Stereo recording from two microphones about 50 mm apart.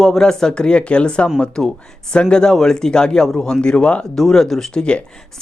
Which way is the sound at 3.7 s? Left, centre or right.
Left.